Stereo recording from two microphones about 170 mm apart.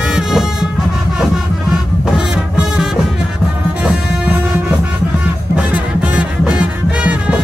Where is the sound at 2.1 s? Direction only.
5° right (ahead or behind).